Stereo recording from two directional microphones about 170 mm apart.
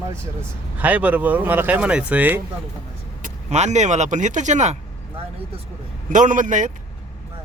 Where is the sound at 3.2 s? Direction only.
45° right (ahead or behind).